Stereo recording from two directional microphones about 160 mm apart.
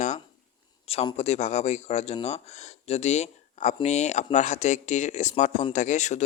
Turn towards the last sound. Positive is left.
turn(degrees=45)  # may be behind; listen again after turning